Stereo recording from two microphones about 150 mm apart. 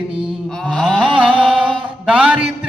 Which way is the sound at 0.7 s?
Centre (ahead or behind).